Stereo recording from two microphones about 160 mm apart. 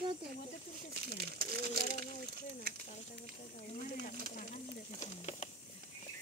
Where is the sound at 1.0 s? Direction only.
80° right.